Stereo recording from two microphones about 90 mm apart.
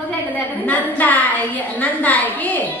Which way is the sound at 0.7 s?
20° left (ahead or behind).